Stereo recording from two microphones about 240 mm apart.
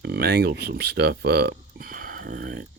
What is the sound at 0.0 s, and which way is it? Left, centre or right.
Speech, right.